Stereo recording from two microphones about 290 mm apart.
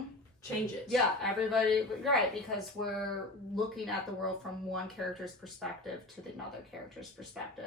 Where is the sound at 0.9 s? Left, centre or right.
Centre.